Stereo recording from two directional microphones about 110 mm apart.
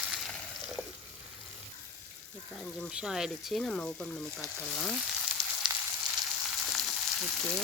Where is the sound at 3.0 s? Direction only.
5° right (ahead or behind).